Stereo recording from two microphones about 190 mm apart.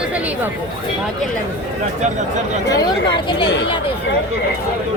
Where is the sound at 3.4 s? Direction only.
65° left (ahead or behind).